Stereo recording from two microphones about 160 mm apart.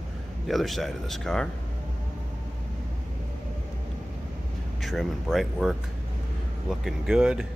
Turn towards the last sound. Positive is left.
turn(degrees=-5)  # may be behind; listen again after turning